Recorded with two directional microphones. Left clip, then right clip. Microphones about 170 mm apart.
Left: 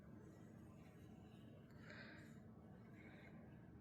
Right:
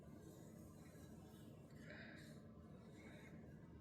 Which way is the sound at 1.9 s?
40° left (ahead or behind).